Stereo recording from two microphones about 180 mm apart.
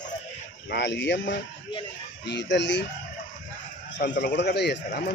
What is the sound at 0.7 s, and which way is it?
A man's voice, 75° left (ahead or behind).